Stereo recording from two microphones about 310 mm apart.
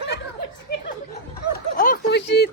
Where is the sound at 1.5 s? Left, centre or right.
Left.